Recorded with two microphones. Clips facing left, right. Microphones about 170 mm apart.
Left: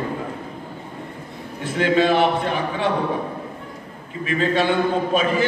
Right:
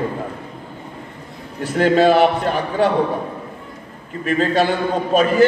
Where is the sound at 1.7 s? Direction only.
40° right (ahead or behind).